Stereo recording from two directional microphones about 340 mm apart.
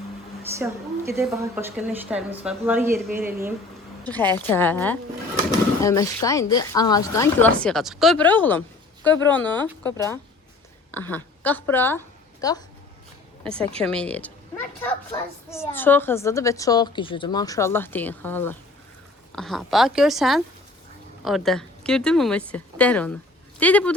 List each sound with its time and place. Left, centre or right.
0.6 s a woman's voice: centre
4.0 s a woman's voice: centre
13.8 s a woman's voice: centre